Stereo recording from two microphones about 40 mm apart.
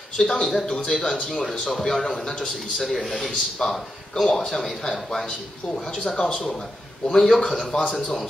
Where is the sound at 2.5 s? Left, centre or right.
Centre.